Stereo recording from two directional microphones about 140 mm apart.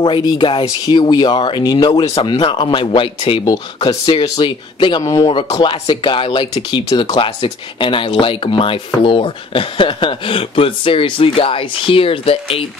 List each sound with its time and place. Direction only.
0.0 s speech: 35° left (ahead or behind)
7.0 s speech: 30° left (ahead or behind)